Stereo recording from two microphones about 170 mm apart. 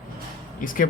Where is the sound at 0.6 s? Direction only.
55° left (ahead or behind).